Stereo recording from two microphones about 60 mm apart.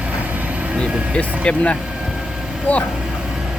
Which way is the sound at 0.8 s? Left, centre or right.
Centre.